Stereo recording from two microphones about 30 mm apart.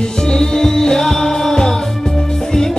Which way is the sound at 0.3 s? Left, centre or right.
Centre.